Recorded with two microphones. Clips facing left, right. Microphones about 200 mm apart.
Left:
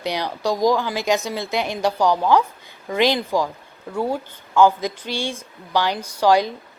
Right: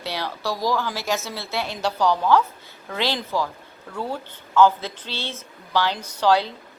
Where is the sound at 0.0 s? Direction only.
15° left (ahead or behind).